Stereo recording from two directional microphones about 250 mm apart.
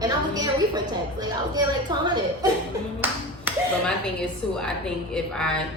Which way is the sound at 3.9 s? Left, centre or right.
Centre.